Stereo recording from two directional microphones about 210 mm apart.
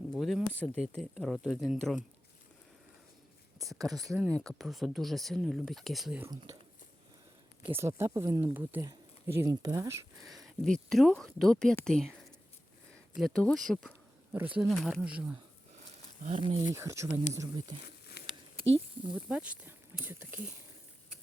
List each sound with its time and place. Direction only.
0.1 s speech: centre (ahead or behind)
3.7 s speech: 15° right (ahead or behind)
3.9 s speech: centre (ahead or behind)
7.8 s speech: 10° right (ahead or behind)
10.2 s speech: centre (ahead or behind)
16.2 s speech: 30° right (ahead or behind)
16.7 s speech: 15° right (ahead or behind)
18.2 s a sound: 50° left (ahead or behind)
19.1 s speech: 5° right (ahead or behind)